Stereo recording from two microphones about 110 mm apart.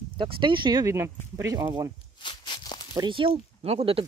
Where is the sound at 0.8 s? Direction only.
25° right (ahead or behind).